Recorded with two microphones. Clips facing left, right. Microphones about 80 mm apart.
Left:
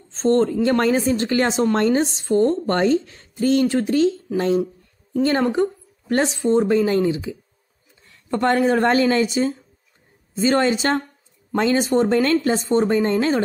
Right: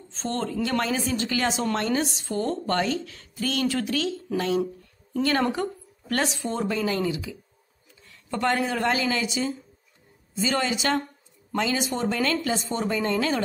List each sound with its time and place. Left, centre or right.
0.1 s speech: left
5.5 s speech: left